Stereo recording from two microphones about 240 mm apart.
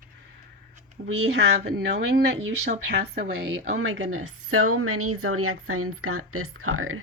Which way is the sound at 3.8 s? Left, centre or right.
Right.